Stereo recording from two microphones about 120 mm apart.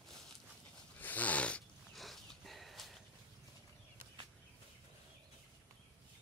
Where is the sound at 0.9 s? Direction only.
15° left (ahead or behind).